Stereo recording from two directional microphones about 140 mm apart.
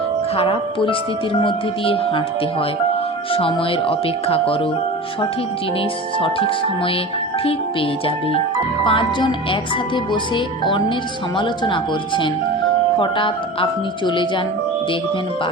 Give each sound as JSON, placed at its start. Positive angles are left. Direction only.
{"t": 0.3, "sound": "speech", "side_deg": 40}
{"t": 6.1, "sound": "speech", "side_deg": 40}